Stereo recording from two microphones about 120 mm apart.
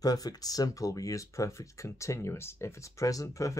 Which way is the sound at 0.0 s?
30° left (ahead or behind).